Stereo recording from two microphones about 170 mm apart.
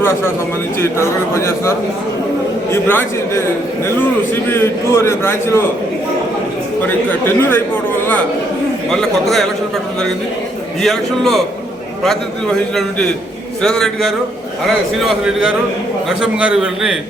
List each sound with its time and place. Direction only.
0.0 s a man's voice: 15° left (ahead or behind)
2.7 s a man's voice: 15° left (ahead or behind)
6.8 s a man's voice: 10° left (ahead or behind)
8.9 s a man's voice: centre (ahead or behind)
10.8 s a man's voice: centre (ahead or behind)